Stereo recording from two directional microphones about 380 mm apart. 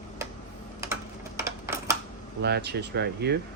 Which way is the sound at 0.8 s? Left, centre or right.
Centre.